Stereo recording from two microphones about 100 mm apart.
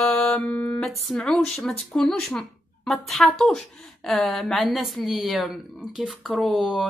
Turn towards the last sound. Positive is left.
turn(degrees=-5)  # may be behind; listen again after turning